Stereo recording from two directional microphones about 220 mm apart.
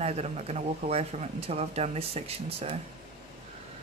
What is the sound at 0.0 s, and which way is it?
Speech, 30° right (ahead or behind).